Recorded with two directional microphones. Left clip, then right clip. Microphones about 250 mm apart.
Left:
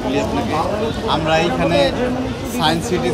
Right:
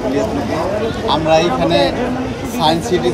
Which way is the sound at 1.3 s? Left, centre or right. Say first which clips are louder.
Right 3 dB; centre.